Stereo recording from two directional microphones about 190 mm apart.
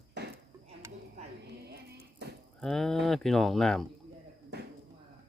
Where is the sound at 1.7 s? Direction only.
60° right (ahead or behind).